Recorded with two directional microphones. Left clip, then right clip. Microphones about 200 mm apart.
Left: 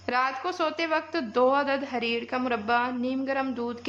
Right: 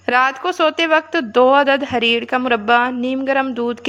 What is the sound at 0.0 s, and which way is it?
A woman's voice, 35° right (ahead or behind).